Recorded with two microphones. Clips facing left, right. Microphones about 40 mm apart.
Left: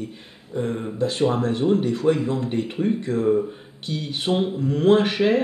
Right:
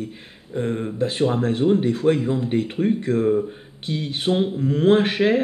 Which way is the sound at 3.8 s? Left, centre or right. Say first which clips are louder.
Right 2 dB; right.